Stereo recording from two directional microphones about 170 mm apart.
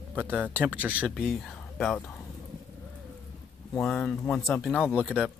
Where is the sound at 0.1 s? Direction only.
10° right (ahead or behind).